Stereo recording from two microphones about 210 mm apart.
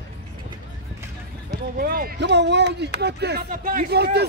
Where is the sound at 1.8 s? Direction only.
45° right (ahead or behind).